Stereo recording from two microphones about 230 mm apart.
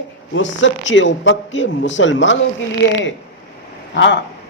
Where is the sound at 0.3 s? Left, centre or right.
Left.